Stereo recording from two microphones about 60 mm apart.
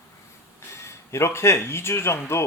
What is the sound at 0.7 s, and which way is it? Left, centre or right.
Speech, left.